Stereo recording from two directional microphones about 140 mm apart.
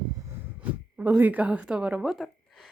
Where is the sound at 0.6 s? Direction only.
10° right (ahead or behind).